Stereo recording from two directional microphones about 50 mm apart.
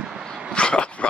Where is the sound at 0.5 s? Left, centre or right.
Left.